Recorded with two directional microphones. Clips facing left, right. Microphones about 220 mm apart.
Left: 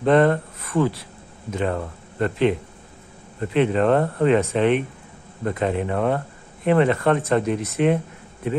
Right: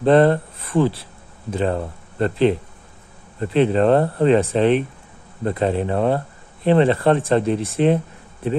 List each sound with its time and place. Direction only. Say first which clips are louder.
0.0 s speech: right 3 dB; 30° right (ahead or behind)